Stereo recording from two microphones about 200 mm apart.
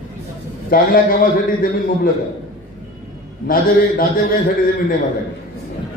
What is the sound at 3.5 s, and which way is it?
Speech, 45° left (ahead or behind).